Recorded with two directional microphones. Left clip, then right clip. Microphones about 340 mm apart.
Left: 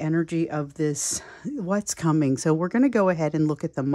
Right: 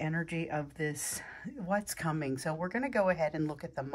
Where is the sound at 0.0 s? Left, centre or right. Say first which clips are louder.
Left 11 dB; centre.